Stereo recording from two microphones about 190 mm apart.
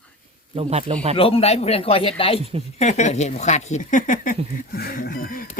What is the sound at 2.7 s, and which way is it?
Speech, 35° left (ahead or behind).